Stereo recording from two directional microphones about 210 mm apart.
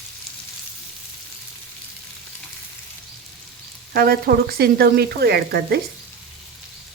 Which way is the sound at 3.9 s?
45° right (ahead or behind).